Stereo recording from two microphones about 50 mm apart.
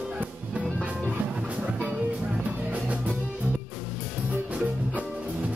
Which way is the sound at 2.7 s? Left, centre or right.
Right.